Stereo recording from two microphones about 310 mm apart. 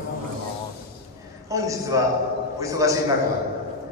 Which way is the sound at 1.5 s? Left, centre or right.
Centre.